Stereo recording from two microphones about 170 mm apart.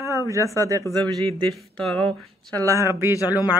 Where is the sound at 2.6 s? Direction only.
15° right (ahead or behind).